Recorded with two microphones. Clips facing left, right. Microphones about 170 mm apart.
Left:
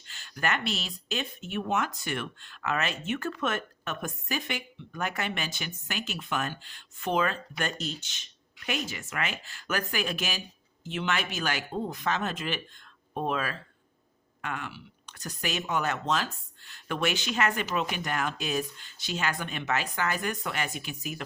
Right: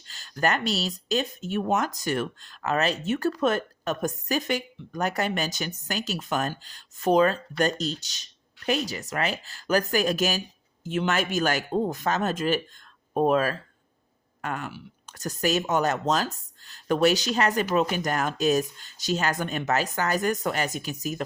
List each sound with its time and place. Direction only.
0.0 s speech: 35° right (ahead or behind)